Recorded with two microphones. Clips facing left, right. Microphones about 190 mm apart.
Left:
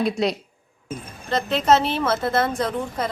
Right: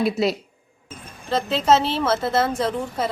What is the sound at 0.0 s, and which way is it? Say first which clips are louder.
A woman's voice: right 1 dB; 5° right (ahead or behind).